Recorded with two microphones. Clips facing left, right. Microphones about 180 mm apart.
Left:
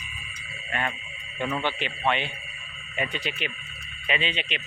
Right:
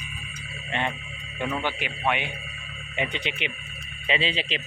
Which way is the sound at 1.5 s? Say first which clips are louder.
Left 1 dB; 10° right (ahead or behind).